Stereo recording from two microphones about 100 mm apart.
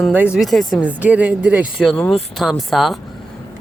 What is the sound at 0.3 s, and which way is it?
Speech, centre (ahead or behind).